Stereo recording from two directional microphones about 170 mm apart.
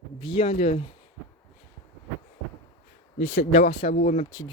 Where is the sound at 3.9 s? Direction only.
45° left (ahead or behind).